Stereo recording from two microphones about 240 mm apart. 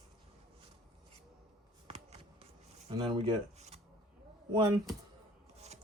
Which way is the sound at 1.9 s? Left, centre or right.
Right.